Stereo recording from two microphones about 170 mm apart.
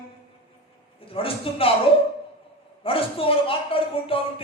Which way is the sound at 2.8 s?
35° left (ahead or behind).